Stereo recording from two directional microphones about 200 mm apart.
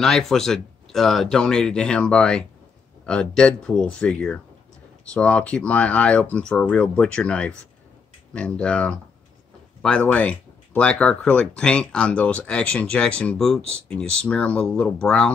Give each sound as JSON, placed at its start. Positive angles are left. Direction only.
{"t": 0.0, "sound": "speech", "side_deg": 0}